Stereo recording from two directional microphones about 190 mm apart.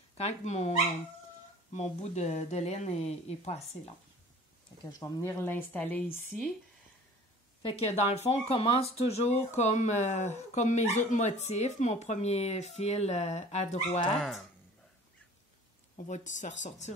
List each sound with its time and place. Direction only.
0.1 s speech: 35° left (ahead or behind)
4.9 s speech: 15° left (ahead or behind)
7.6 s speech: 35° left (ahead or behind)
16.1 s speech: 40° left (ahead or behind)